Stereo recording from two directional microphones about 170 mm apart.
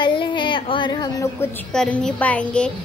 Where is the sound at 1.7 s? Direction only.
5° left (ahead or behind).